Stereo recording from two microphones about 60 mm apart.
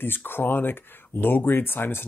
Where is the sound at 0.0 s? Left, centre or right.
Left.